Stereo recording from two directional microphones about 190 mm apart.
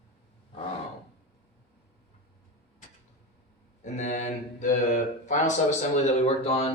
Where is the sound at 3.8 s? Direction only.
40° left (ahead or behind).